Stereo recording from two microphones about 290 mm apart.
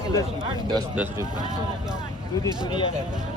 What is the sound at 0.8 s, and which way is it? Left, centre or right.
Speech, centre.